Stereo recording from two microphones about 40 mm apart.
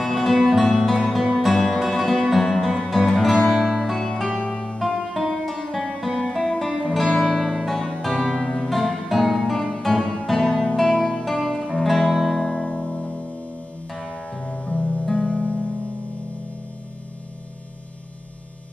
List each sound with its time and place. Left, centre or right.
0.0 s music: centre
7.7 s music: centre
8.7 s music: centre
11.0 s music: left
11.4 s music: centre
12.4 s music: centre
12.7 s music: left
13.9 s music: centre
14.4 s music: centre
15.0 s music: centre